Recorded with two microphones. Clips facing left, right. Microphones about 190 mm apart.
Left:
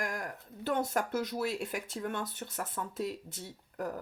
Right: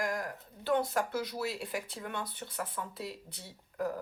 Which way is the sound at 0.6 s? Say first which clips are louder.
Right 1 dB; 45° left (ahead or behind).